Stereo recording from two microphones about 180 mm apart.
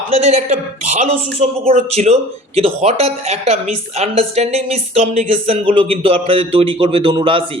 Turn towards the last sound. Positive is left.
turn(degrees=-30)  # may be behind; listen again after turning